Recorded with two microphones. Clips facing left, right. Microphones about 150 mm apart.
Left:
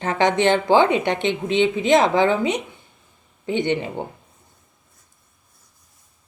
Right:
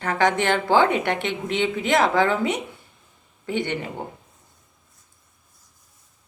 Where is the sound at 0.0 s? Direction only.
20° left (ahead or behind).